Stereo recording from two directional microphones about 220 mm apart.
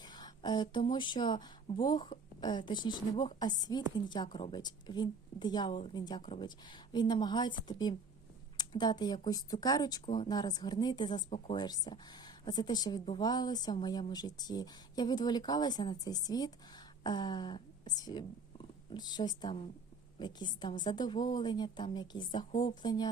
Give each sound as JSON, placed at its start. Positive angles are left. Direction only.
{"t": 0.0, "sound": "speech", "side_deg": 20}